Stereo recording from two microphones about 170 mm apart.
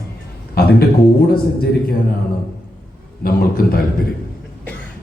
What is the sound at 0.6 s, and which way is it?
Speech, 60° left (ahead or behind).